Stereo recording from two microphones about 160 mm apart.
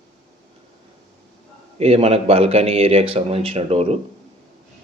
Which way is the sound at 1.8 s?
40° right (ahead or behind).